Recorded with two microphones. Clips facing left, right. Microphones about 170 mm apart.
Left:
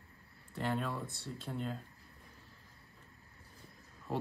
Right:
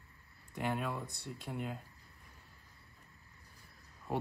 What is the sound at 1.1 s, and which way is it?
Speech, 15° right (ahead or behind).